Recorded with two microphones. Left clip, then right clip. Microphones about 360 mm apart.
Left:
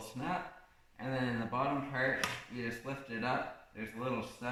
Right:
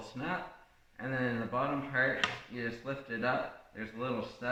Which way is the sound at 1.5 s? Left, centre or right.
Centre.